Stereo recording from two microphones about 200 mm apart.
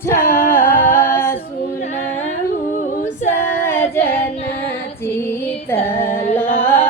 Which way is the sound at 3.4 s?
10° left (ahead or behind).